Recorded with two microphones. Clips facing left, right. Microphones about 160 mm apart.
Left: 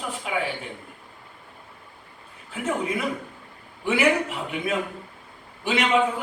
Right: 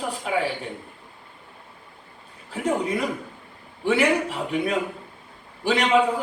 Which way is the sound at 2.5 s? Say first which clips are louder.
Right 3 dB; 35° right (ahead or behind).